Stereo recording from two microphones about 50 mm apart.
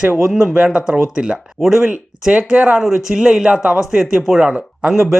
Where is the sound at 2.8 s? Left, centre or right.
Centre.